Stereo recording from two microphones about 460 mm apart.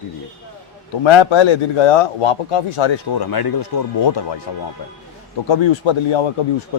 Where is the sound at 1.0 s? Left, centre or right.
Left.